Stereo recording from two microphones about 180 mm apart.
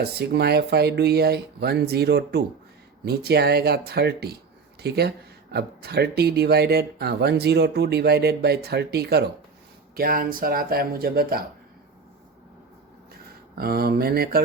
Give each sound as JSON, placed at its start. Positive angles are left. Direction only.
{"t": 0.0, "sound": "speech", "side_deg": -65}
{"t": 13.6, "sound": "speech", "side_deg": -60}